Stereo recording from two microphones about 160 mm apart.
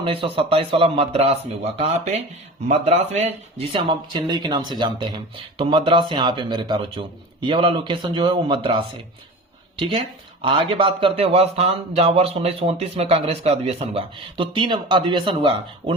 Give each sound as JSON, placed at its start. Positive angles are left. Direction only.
{"t": 0.0, "sound": "speech", "side_deg": -35}
{"t": 10.4, "sound": "speech", "side_deg": -30}